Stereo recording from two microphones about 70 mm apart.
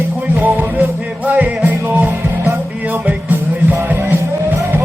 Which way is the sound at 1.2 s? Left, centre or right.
Right.